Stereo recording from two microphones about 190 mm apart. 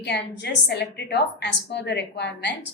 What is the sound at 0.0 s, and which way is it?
A woman's voice, 60° left (ahead or behind).